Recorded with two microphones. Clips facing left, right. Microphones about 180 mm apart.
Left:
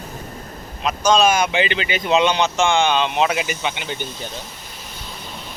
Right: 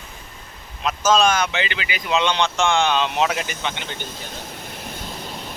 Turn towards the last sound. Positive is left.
turn(degrees=10)  # may be behind; listen again after turning